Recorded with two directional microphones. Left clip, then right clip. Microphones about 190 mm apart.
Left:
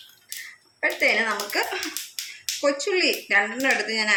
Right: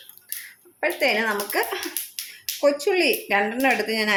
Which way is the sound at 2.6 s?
60° right (ahead or behind).